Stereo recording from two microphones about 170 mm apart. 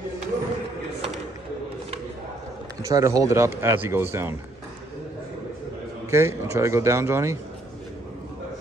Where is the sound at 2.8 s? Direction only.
20° right (ahead or behind).